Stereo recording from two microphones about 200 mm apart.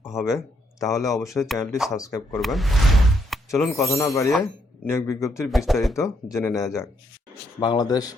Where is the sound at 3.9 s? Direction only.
15° left (ahead or behind).